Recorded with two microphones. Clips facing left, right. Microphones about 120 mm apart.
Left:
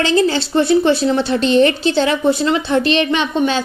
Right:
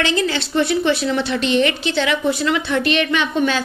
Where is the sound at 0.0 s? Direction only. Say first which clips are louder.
Left 5 dB; 35° left (ahead or behind).